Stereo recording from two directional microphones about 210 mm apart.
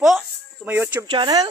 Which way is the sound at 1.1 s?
20° right (ahead or behind).